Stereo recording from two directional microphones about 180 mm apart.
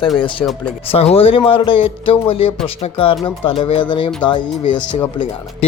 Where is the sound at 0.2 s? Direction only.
30° left (ahead or behind).